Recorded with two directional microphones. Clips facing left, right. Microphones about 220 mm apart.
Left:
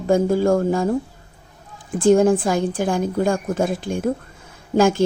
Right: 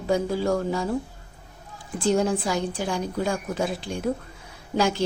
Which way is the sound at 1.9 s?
50° left (ahead or behind).